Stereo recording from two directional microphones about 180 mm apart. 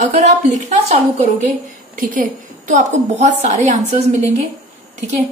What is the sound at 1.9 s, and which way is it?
A woman's voice, 50° right (ahead or behind).